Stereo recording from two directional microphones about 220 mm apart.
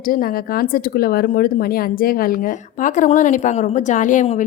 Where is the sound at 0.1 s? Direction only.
40° left (ahead or behind).